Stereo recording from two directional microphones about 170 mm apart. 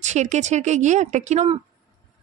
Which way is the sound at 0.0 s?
45° right (ahead or behind).